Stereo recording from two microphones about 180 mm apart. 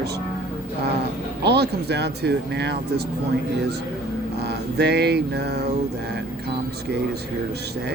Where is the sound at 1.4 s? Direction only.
65° right (ahead or behind).